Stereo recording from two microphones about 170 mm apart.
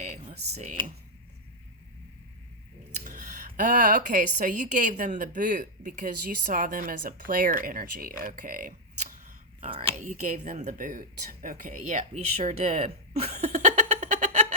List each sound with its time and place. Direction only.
0.0 s typing: 40° right (ahead or behind)
3.0 s speech: 55° right (ahead or behind)
9.6 s speech: 30° right (ahead or behind)
10.0 s a woman's voice: 45° right (ahead or behind)
13.1 s laughter: 40° right (ahead or behind)